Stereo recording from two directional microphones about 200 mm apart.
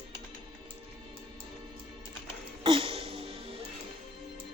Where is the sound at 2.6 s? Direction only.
30° right (ahead or behind).